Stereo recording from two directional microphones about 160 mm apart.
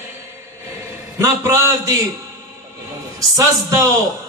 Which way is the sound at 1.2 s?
15° right (ahead or behind).